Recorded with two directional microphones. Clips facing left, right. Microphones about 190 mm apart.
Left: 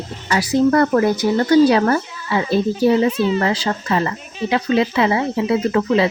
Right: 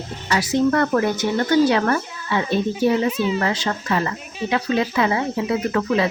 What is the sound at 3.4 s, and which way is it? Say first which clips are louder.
Speech: left 3 dB; 30° left (ahead or behind).